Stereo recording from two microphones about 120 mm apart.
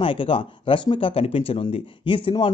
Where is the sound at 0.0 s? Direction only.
45° left (ahead or behind).